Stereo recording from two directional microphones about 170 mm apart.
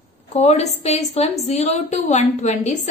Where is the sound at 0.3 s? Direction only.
40° left (ahead or behind).